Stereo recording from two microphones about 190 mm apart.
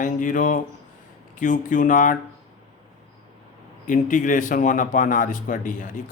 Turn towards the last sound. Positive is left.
turn(degrees=45)  # may be behind; listen again after turning